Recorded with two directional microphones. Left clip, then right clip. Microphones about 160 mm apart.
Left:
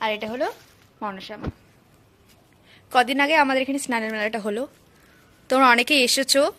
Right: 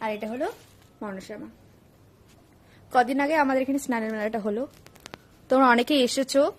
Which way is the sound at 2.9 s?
5° right (ahead or behind).